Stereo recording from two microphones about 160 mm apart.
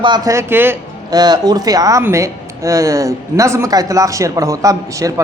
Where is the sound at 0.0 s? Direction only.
25° right (ahead or behind).